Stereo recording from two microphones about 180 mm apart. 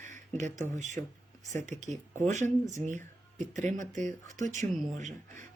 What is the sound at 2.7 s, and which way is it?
Speech, 40° right (ahead or behind).